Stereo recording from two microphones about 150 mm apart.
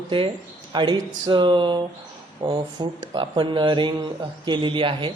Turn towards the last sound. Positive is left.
turn(degrees=-35)  # may be behind; listen again after turning